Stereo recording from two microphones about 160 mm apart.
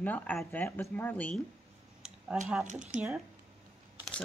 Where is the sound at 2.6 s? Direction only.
55° right (ahead or behind).